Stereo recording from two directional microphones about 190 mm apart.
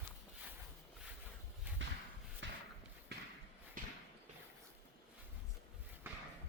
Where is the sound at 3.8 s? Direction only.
45° right (ahead or behind).